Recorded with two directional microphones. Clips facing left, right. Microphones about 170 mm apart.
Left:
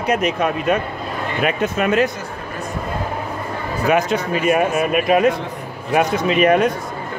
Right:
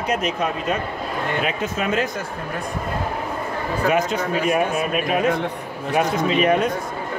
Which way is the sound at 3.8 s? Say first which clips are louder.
Left 3 dB; 70° left (ahead or behind).